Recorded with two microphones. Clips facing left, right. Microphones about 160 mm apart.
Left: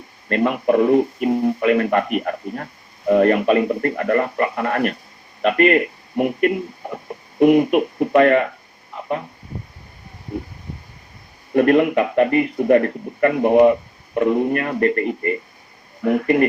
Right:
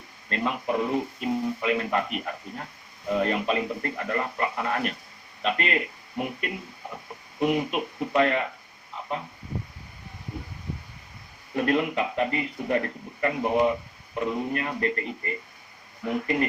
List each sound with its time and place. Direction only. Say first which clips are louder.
0.3 s speech: left 10 dB; 60° left (ahead or behind)
11.5 s speech: left 10 dB; 60° left (ahead or behind)